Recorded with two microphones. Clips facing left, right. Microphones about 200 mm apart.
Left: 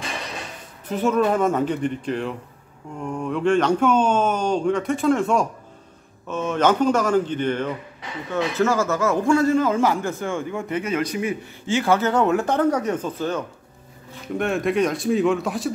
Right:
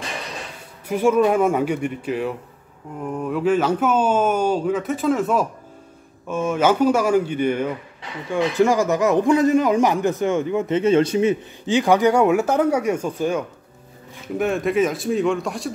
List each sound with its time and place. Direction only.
0.8 s a man's voice: 10° right (ahead or behind)